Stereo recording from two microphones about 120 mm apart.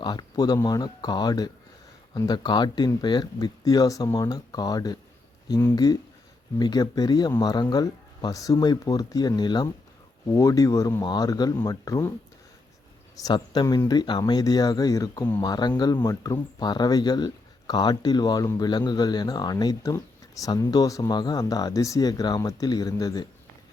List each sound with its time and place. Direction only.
0.0 s speech: 35° left (ahead or behind)
13.2 s speech: 35° left (ahead or behind)